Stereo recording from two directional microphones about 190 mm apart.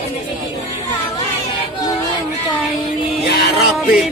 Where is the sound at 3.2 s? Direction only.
55° left (ahead or behind).